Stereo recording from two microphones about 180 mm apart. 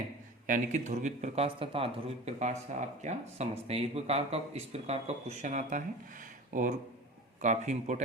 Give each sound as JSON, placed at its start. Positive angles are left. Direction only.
{"t": 0.4, "sound": "speech", "side_deg": -45}